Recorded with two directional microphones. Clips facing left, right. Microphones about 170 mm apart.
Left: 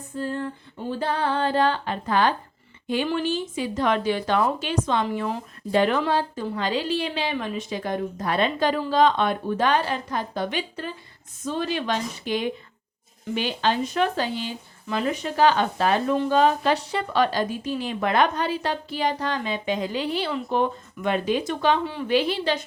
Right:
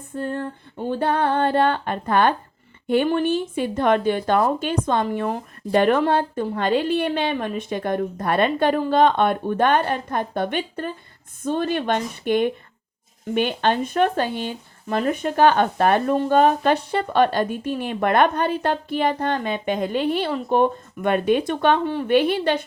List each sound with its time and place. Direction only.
0.2 s speech: 55° right (ahead or behind)